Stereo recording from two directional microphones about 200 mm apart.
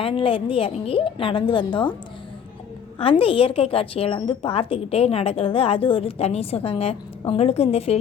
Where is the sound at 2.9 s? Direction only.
25° left (ahead or behind).